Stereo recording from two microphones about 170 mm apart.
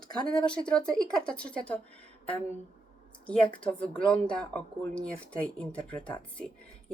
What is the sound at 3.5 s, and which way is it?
Speech, 5° left (ahead or behind).